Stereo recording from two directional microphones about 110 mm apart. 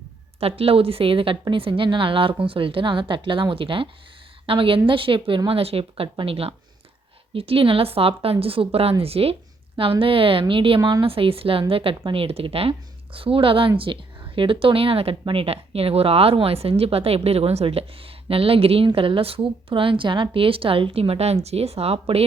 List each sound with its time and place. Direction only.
0.3 s a woman's voice: 60° right (ahead or behind)
10.8 s a woman's voice: 35° right (ahead or behind)
11.0 s a woman's voice: 55° right (ahead or behind)